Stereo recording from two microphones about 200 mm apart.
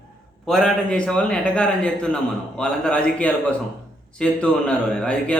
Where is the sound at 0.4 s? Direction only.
Centre (ahead or behind).